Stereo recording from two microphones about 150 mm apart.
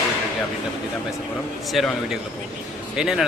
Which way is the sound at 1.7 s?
Centre (ahead or behind).